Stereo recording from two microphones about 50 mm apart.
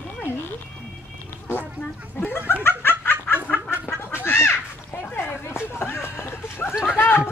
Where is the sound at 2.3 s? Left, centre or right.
Left.